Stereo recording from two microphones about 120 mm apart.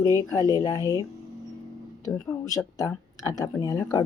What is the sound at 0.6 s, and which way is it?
Speech, 25° left (ahead or behind).